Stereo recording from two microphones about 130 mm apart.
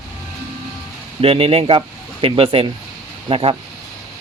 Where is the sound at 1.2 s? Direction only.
45° right (ahead or behind).